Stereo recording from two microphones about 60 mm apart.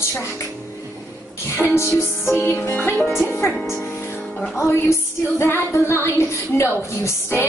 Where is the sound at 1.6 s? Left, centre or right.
Left.